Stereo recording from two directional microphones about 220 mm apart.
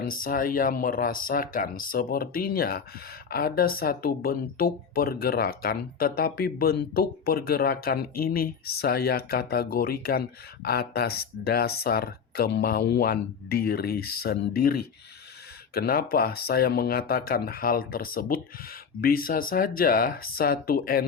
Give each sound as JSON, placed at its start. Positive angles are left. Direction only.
{"t": 0.0, "sound": "speech", "side_deg": 40}